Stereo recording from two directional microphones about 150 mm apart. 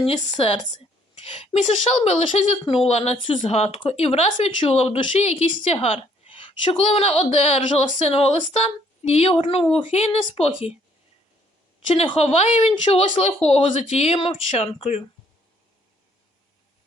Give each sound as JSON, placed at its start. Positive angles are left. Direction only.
{"t": 0.0, "sound": "a woman's voice", "side_deg": 40}
{"t": 11.9, "sound": "a woman's voice", "side_deg": 40}